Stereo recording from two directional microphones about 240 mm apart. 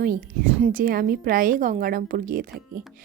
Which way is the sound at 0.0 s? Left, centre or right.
Right.